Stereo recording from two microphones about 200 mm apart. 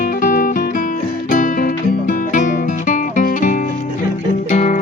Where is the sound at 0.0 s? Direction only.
45° left (ahead or behind).